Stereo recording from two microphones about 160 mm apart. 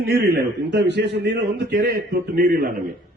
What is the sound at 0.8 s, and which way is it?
A man's voice, 90° right.